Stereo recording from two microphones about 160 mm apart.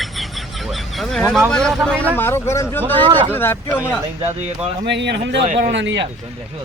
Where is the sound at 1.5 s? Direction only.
5° left (ahead or behind).